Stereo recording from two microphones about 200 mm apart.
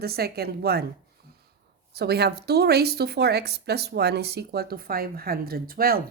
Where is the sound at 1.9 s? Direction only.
55° right (ahead or behind).